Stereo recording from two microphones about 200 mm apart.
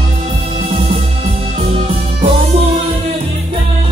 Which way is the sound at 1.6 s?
30° right (ahead or behind).